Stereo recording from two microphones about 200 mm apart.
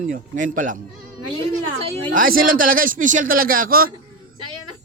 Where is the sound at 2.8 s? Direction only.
40° right (ahead or behind).